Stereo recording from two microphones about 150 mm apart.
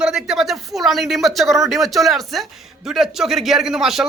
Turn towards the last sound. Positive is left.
turn(degrees=-5)  # may be behind; listen again after turning